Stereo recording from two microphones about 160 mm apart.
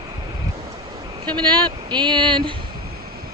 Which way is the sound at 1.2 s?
25° right (ahead or behind).